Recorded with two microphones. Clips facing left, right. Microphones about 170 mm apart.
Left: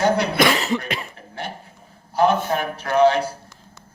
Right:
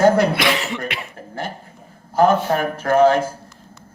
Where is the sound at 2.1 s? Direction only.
45° right (ahead or behind).